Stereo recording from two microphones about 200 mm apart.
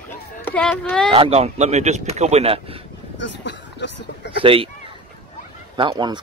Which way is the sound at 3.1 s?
60° left (ahead or behind).